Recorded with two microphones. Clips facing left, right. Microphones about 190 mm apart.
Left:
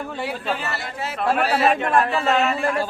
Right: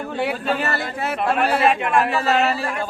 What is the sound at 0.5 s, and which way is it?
Speech, 60° right (ahead or behind).